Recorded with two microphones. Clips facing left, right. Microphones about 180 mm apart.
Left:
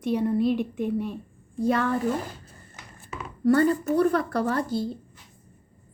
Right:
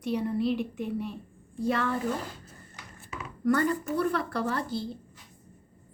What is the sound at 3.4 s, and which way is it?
A woman's voice, 30° left (ahead or behind).